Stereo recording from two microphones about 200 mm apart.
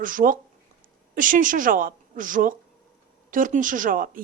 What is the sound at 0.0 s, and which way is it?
A woman's voice, 45° right (ahead or behind).